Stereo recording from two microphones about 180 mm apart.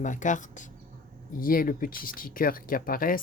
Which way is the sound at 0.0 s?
45° left (ahead or behind).